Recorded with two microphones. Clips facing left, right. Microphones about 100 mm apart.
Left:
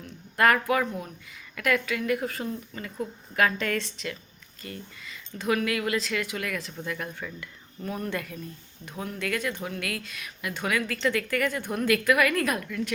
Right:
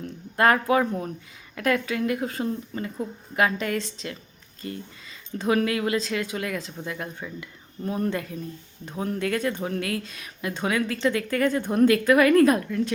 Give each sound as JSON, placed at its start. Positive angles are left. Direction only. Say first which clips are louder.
{"t": 0.3, "sound": "a woman's voice", "louder": "right 2 dB", "side_deg": -30}